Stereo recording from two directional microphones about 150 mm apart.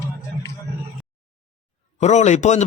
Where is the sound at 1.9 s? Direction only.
50° left (ahead or behind).